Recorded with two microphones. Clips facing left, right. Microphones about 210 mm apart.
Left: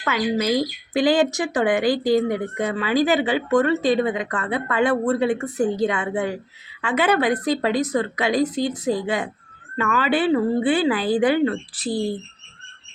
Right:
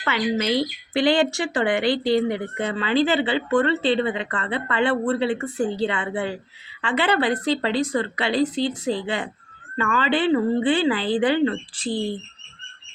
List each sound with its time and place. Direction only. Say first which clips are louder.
0.0 s speech: left 1 dB; 5° left (ahead or behind)